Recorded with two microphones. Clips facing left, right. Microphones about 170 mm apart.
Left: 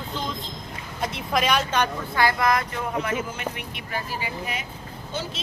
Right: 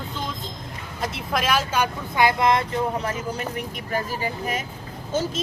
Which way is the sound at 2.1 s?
20° right (ahead or behind).